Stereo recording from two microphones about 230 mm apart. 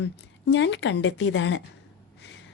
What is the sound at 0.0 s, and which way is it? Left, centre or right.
A woman's voice, left.